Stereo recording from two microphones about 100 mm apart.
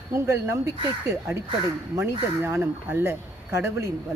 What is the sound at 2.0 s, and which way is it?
Speech, 25° right (ahead or behind).